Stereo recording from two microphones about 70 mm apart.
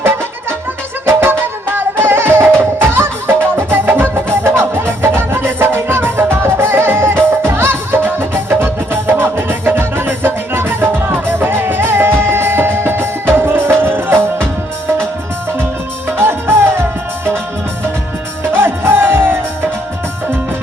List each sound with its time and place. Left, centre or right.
1.0 s music: right
16.1 s music: right
18.5 s music: right